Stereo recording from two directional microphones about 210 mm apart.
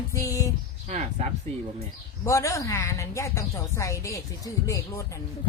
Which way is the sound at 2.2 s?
15° left (ahead or behind).